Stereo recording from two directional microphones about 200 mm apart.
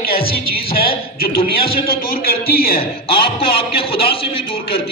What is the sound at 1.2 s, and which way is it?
A man's voice, 50° left (ahead or behind).